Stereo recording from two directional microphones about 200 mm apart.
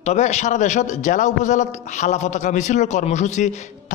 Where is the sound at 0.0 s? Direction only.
35° left (ahead or behind).